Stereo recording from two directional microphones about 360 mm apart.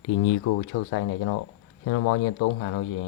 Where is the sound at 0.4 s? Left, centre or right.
Left.